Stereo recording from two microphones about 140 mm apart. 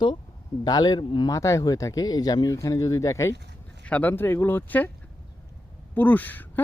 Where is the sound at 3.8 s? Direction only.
10° left (ahead or behind).